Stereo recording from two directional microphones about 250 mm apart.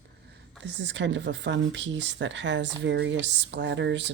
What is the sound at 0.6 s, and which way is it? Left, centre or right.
Speech, right.